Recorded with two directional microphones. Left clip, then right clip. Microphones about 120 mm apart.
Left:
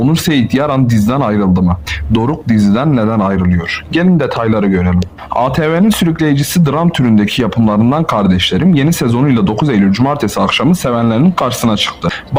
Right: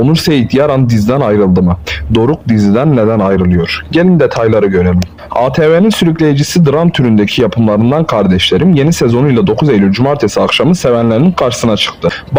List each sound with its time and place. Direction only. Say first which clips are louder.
0.0 s speech: right 3 dB; 40° right (ahead or behind)